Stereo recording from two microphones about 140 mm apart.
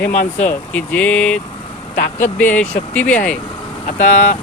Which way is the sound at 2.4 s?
10° left (ahead or behind).